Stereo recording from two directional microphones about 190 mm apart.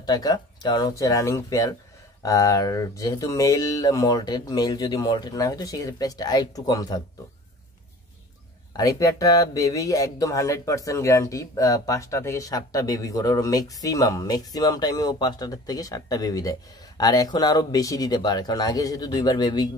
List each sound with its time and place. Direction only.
0.0 s speech: 20° left (ahead or behind)
8.7 s speech: 20° left (ahead or behind)